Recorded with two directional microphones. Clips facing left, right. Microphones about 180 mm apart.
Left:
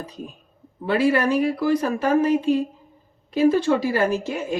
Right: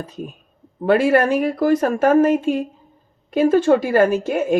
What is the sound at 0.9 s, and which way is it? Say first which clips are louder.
Speech: right 4 dB; 45° right (ahead or behind).